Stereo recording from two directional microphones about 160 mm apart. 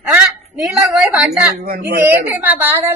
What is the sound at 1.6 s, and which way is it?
Speech, 75° right (ahead or behind).